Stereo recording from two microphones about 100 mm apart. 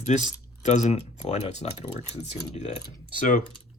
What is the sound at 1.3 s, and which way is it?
Speech, 90° left.